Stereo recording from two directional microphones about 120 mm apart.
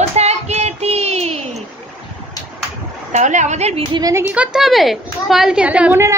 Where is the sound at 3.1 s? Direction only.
80° right.